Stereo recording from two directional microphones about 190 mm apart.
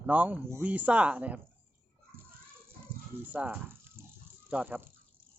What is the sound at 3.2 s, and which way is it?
Speech, 10° right (ahead or behind).